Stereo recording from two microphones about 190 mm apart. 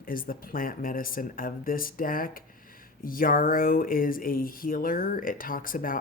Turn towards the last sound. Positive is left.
turn(degrees=45)  # may be behind; listen again after turning